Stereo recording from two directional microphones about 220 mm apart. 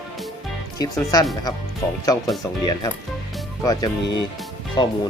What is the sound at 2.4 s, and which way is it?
Speech, 15° left (ahead or behind).